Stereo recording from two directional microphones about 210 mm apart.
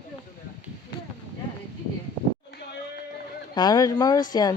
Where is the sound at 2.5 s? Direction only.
55° left (ahead or behind).